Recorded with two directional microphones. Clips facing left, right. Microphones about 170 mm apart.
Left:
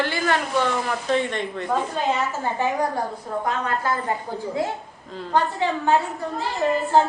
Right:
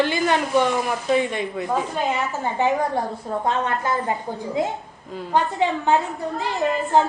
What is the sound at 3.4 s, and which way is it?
Speech, 20° right (ahead or behind).